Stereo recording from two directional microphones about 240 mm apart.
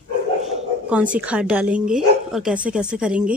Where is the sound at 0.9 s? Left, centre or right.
Centre.